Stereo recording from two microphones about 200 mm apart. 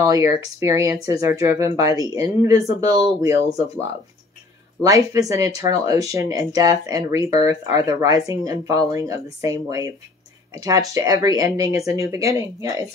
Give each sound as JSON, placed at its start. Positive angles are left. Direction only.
{"t": 0.0, "sound": "speech", "side_deg": -20}
{"t": 4.8, "sound": "speech", "side_deg": -15}